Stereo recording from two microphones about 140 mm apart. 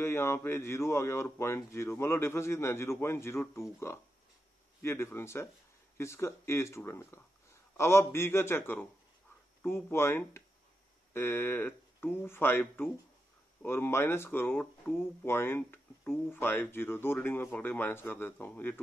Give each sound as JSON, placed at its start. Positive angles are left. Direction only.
{"t": 0.0, "sound": "speech", "side_deg": 15}